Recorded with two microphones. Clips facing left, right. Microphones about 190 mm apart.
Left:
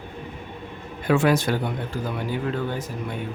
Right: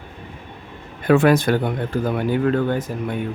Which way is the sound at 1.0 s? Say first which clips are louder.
Right 5 dB; 55° right (ahead or behind).